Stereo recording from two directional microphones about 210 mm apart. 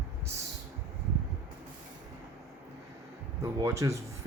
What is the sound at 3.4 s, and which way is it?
Speech, 15° right (ahead or behind).